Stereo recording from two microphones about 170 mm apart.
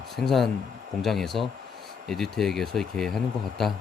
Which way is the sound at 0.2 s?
Centre (ahead or behind).